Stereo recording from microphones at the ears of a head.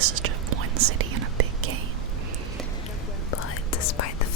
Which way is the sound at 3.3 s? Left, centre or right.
Left.